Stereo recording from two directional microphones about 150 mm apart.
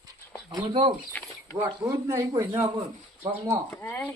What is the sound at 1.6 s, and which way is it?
A man's voice, 20° right (ahead or behind).